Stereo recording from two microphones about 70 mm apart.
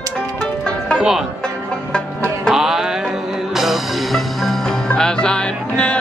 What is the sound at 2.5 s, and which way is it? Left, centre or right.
Music, centre.